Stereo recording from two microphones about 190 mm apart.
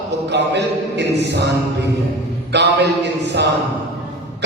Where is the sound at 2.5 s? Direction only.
65° right (ahead or behind).